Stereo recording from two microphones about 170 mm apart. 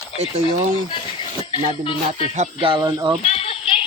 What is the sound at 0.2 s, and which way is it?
Speech, 40° right (ahead or behind).